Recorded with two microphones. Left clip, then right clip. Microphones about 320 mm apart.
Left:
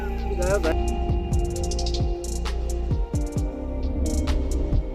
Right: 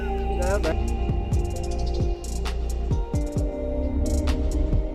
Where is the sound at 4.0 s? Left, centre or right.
Centre.